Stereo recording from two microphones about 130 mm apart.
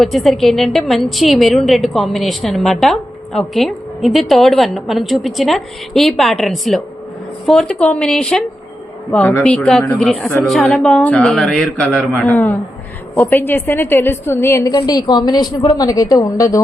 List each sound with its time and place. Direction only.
0.0 s a woman's voice: centre (ahead or behind)
9.6 s a man's voice: 10° left (ahead or behind); by 16.6 s 25° left (ahead or behind)